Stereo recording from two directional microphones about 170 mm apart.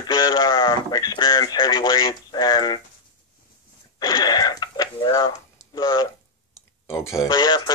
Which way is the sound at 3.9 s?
25° left (ahead or behind).